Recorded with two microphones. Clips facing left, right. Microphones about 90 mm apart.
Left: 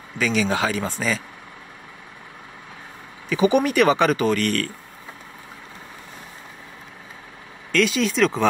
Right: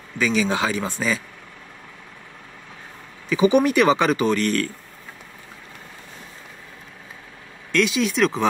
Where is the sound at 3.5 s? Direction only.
25° right (ahead or behind).